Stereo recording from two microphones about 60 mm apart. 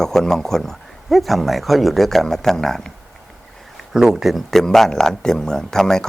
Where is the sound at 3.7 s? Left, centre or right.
Centre.